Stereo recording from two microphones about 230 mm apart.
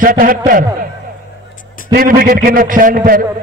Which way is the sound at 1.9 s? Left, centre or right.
Right.